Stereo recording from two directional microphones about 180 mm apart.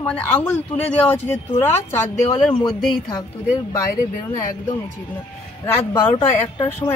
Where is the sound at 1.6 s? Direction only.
10° left (ahead or behind).